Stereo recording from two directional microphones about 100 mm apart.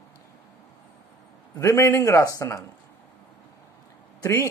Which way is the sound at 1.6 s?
30° left (ahead or behind).